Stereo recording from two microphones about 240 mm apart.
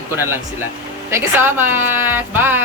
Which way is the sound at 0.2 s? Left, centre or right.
Centre.